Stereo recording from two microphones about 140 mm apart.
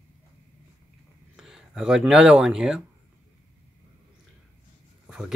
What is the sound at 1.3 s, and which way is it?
Speech, 5° right (ahead or behind).